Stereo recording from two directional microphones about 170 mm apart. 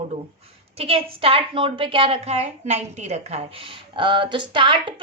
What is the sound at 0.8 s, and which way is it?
A woman's voice, 35° right (ahead or behind).